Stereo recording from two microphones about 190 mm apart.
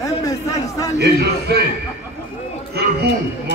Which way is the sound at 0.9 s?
60° right (ahead or behind).